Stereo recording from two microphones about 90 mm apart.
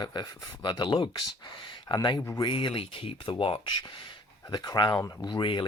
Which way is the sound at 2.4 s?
70° left (ahead or behind).